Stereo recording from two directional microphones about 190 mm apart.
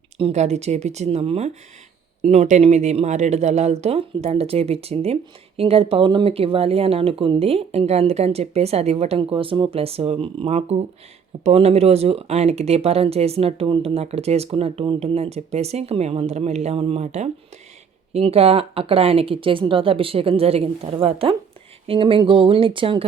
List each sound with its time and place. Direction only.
0.2 s a woman's voice: 35° right (ahead or behind)